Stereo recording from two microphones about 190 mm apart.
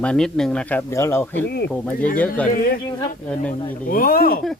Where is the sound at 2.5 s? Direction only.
45° left (ahead or behind).